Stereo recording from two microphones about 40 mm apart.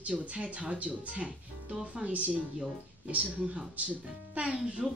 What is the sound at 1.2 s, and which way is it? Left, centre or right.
Speech, centre.